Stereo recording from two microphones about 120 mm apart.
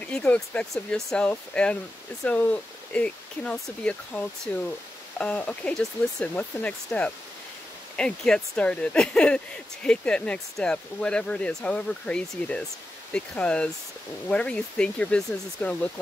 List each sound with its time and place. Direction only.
0.0 s speech: 10° left (ahead or behind)